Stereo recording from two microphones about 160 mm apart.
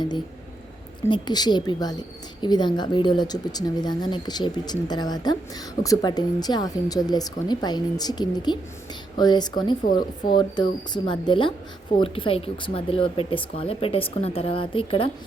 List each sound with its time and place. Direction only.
1.0 s a woman's voice: 25° left (ahead or behind)